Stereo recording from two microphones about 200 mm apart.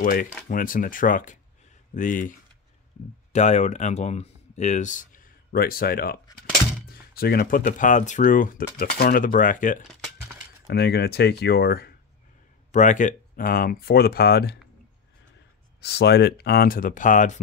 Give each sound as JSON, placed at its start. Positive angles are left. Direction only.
{"t": 0.0, "sound": "speech", "side_deg": 45}
{"t": 3.3, "sound": "speech", "side_deg": 35}
{"t": 10.7, "sound": "speech", "side_deg": 55}
{"t": 12.7, "sound": "speech", "side_deg": 40}
{"t": 15.8, "sound": "speech", "side_deg": 55}